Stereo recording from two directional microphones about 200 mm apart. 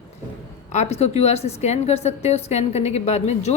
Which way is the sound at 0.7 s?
35° left (ahead or behind).